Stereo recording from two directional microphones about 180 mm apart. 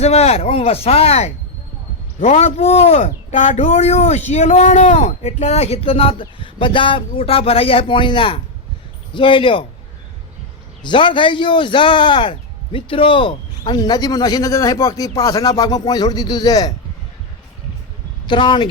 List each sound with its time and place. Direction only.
0.0 s speech: 35° left (ahead or behind)
10.8 s speech: 25° left (ahead or behind)
18.3 s speech: 25° left (ahead or behind)